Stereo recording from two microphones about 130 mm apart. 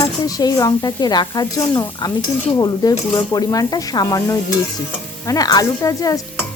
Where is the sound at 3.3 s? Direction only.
30° left (ahead or behind).